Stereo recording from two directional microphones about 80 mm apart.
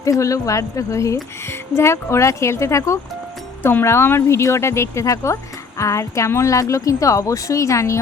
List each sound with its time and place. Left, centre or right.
0.0 s speech: left
3.6 s speech: left